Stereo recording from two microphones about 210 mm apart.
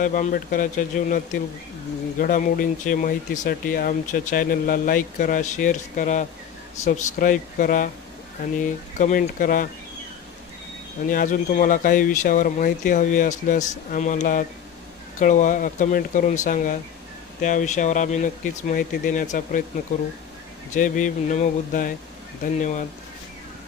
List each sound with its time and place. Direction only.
0.0 s speech: 40° left (ahead or behind)
11.1 s speech: 40° left (ahead or behind)
20.7 s speech: 40° left (ahead or behind)